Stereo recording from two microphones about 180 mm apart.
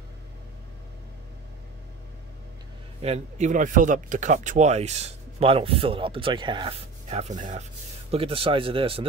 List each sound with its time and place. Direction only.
3.0 s speech: 40° right (ahead or behind)
8.1 s speech: 30° right (ahead or behind)